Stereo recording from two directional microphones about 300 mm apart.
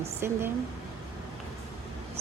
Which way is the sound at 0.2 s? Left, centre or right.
Centre.